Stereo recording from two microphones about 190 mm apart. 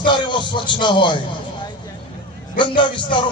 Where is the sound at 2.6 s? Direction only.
25° left (ahead or behind).